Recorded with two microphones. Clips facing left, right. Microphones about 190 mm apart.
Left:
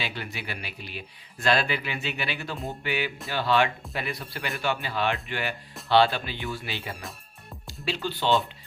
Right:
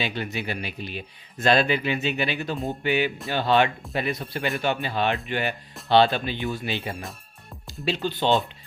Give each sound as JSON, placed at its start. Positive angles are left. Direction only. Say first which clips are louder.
{"t": 0.0, "sound": "speech", "louder": "right 6 dB", "side_deg": -20}